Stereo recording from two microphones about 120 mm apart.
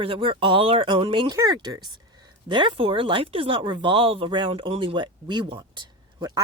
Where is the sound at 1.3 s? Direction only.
35° right (ahead or behind).